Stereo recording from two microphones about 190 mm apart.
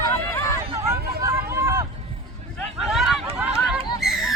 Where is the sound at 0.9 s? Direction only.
15° right (ahead or behind).